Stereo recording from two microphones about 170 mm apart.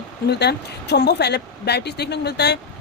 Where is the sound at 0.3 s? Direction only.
80° left.